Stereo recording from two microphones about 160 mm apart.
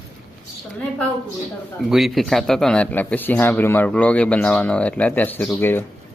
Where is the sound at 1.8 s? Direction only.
Centre (ahead or behind).